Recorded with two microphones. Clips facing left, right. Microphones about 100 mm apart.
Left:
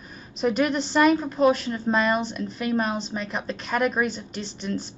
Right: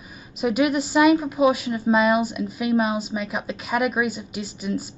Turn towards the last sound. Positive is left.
turn(degrees=-5)  # may be behind; listen again after turning